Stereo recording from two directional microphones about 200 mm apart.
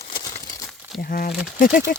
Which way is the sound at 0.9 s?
50° left (ahead or behind).